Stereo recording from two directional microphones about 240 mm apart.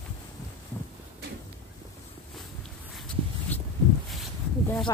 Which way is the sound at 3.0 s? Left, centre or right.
Centre.